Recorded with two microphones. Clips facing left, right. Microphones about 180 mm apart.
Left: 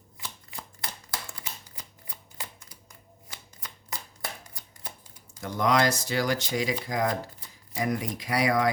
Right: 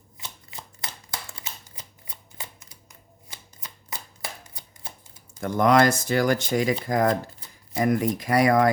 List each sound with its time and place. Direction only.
0.2 s shuffling cards: 20° right (ahead or behind)
3.2 s shuffling cards: 25° right (ahead or behind)
5.4 s speech: 55° right (ahead or behind)